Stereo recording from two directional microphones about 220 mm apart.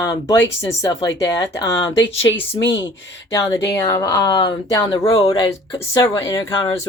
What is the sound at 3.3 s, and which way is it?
Speech, 15° left (ahead or behind).